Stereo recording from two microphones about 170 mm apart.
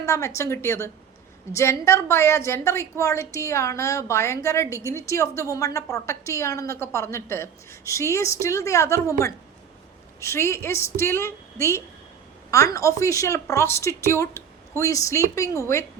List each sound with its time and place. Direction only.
0.0 s a woman's voice: 15° left (ahead or behind)